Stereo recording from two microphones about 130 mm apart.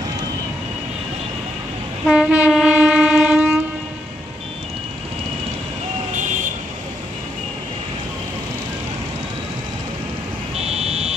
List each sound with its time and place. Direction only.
2.0 s train: 5° right (ahead or behind)
6.1 s vehicle: 80° right
10.6 s buzzer: 55° right (ahead or behind)